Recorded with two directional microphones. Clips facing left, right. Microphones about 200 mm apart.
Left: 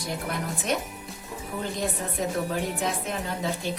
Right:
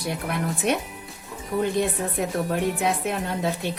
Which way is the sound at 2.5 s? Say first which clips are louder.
Right 4 dB; 60° right (ahead or behind).